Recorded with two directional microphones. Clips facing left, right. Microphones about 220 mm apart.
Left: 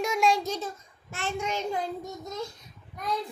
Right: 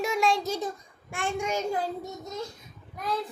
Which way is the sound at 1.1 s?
15° right (ahead or behind).